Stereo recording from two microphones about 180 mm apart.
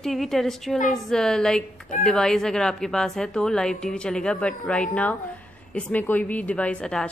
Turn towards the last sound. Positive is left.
turn(degrees=5)  # may be behind; listen again after turning